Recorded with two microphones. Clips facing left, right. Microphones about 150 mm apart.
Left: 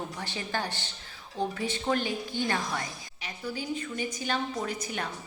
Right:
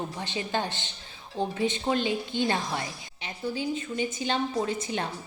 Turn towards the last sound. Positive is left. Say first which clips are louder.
# right 4 dB
turn(degrees=-25)  # may be behind; listen again after turning